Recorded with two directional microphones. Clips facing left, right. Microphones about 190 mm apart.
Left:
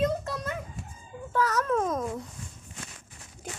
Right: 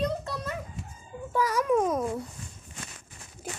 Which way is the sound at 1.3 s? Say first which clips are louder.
Right 2 dB; 10° right (ahead or behind).